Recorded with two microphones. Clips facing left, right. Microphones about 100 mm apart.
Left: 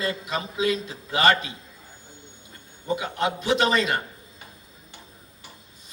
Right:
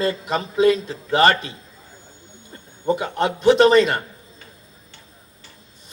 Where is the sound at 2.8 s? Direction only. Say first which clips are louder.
Right 5 dB; 50° right (ahead or behind).